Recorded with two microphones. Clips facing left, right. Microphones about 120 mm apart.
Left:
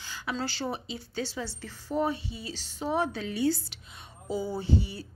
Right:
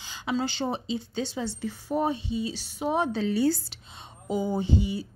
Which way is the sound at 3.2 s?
35° right (ahead or behind).